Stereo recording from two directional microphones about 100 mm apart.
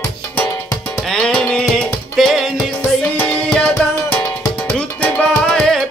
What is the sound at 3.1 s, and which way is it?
Music, 15° left (ahead or behind).